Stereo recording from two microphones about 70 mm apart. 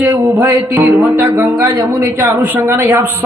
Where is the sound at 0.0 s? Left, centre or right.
Right.